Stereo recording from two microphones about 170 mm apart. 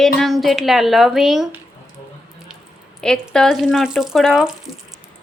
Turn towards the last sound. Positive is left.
turn(degrees=0)  # may be behind; listen again after turning